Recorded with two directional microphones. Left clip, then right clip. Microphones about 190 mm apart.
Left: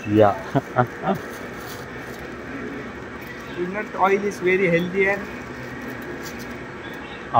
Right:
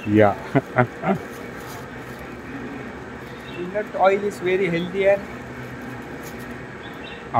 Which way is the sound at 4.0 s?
20° right (ahead or behind).